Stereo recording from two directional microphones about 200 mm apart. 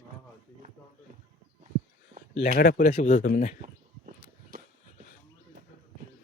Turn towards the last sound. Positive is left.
turn(degrees=-45)  # may be behind; listen again after turning